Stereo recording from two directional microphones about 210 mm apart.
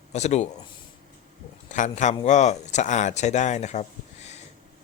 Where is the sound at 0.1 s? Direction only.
35° left (ahead or behind).